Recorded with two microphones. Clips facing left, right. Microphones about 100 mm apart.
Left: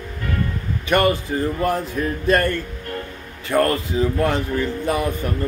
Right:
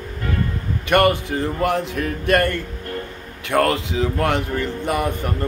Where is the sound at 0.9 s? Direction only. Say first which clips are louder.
Right 2 dB; 60° right (ahead or behind); by 2.5 s 75° right (ahead or behind).